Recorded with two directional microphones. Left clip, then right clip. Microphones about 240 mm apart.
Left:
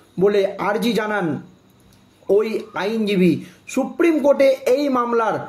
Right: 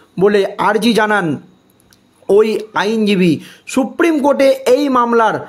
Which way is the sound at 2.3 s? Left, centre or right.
Right.